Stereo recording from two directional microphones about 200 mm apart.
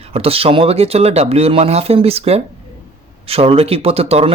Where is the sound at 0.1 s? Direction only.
30° right (ahead or behind).